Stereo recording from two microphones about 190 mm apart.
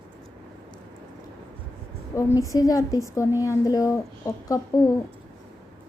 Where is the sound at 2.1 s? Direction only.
15° left (ahead or behind).